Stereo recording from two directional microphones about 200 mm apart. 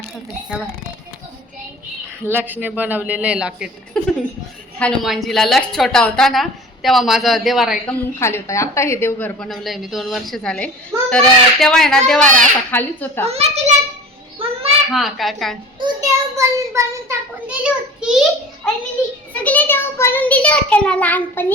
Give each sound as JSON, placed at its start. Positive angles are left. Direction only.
{"t": 2.2, "sound": "a child's voice", "side_deg": -10}
{"t": 8.2, "sound": "a woman's voice", "side_deg": 15}
{"t": 13.2, "sound": "a child's voice", "side_deg": -30}
{"t": 14.4, "sound": "a sound", "side_deg": -25}
{"t": 14.9, "sound": "a woman's voice", "side_deg": 0}
{"t": 15.8, "sound": "a child's voice", "side_deg": -15}